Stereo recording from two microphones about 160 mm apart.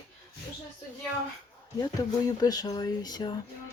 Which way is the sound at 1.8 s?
25° left (ahead or behind).